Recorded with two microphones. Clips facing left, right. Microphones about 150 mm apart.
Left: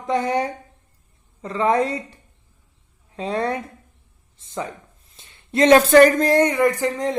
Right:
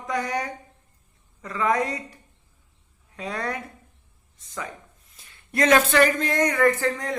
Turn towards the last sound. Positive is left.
turn(degrees=20)  # may be behind; listen again after turning